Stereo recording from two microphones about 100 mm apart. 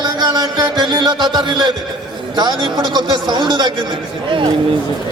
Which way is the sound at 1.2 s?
50° right (ahead or behind).